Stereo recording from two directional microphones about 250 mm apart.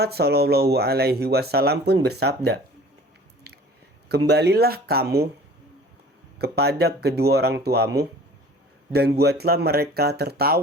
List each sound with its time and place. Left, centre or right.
0.0 s speech: right
4.3 s speech: right
6.4 s speech: right
8.9 s speech: right